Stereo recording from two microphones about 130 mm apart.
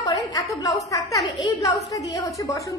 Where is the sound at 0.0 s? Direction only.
30° left (ahead or behind).